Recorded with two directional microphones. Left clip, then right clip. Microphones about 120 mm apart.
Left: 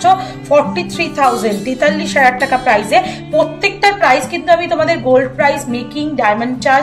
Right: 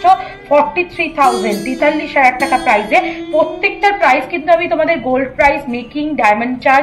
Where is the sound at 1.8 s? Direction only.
90° left; by 6.8 s 70° left (ahead or behind).